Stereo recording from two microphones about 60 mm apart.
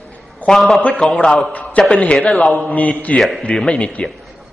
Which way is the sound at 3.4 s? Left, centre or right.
Centre.